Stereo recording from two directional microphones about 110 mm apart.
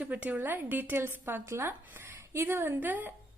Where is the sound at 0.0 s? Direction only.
15° right (ahead or behind).